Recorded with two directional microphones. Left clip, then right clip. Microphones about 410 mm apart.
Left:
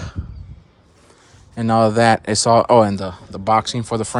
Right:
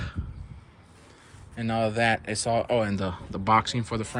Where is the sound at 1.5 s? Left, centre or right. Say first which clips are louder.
Left 11 dB; centre.